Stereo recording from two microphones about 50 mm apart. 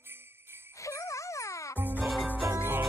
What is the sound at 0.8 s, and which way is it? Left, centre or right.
Music, left.